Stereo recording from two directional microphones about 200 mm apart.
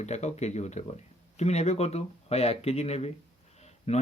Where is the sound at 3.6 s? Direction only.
35° left (ahead or behind).